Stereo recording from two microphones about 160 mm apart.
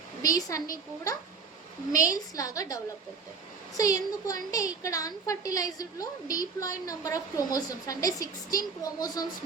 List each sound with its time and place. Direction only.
0.2 s a woman's voice: 20° left (ahead or behind)